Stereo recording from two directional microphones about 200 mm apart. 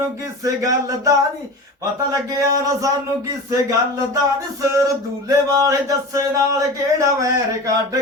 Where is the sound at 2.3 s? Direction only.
15° right (ahead or behind).